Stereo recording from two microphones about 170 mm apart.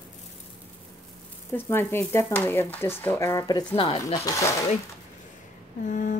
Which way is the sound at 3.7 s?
35° left (ahead or behind).